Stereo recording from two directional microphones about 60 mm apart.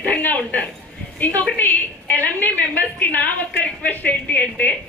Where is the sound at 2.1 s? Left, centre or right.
Left.